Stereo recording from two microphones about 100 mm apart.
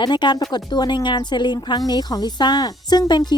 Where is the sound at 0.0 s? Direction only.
50° left (ahead or behind).